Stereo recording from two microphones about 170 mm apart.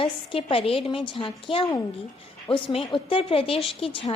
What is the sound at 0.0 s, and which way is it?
A woman's voice, 30° left (ahead or behind).